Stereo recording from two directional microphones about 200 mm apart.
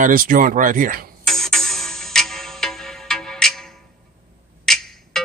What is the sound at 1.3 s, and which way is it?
Music, centre (ahead or behind).